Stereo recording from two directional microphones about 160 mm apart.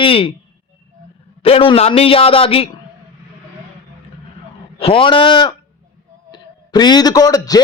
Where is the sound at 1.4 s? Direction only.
35° left (ahead or behind).